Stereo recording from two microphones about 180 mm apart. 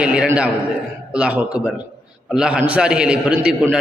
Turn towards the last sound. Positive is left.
turn(degrees=-5)  # may be behind; listen again after turning